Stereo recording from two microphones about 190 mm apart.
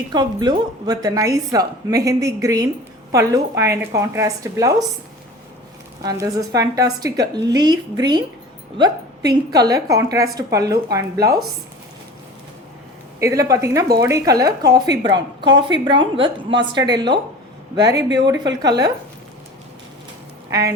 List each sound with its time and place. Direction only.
0.1 s a woman's voice: 20° right (ahead or behind)
6.0 s a woman's voice: 20° right (ahead or behind)
13.1 s a woman's voice: 15° right (ahead or behind)
20.5 s a woman's voice: 15° right (ahead or behind)